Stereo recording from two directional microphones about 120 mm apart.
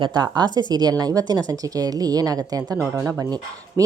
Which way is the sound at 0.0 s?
40° right (ahead or behind).